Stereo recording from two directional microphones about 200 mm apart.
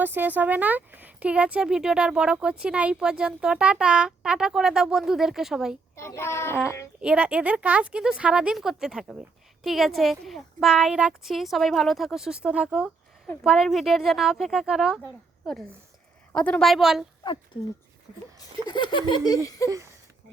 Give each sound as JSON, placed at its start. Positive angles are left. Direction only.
{"t": 0.0, "sound": "speech", "side_deg": -10}
{"t": 6.0, "sound": "a child's voice", "side_deg": 15}
{"t": 7.0, "sound": "speech", "side_deg": -5}
{"t": 16.3, "sound": "speech", "side_deg": 5}
{"t": 18.7, "sound": "laughter", "side_deg": 25}
{"t": 19.6, "sound": "speech", "side_deg": -15}